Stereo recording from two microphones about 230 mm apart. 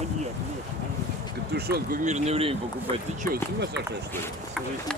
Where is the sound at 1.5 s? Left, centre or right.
Right.